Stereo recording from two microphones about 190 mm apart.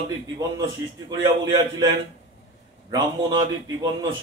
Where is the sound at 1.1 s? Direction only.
20° right (ahead or behind).